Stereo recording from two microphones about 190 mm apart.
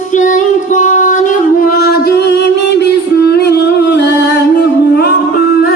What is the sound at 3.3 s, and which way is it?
Music, 60° left (ahead or behind).